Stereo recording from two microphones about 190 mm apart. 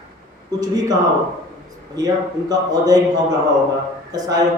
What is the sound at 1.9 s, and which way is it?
Speech, 20° right (ahead or behind).